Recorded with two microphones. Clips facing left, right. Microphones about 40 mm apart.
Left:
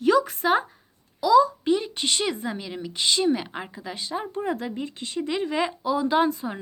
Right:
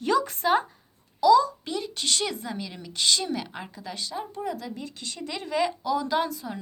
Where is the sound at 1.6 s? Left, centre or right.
Left.